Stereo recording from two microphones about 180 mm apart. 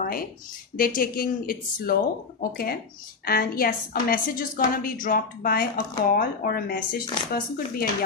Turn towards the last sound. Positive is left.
turn(degrees=55)  # may be behind; listen again after turning